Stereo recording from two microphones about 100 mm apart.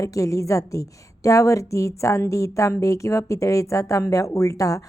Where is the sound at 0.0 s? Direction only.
35° left (ahead or behind).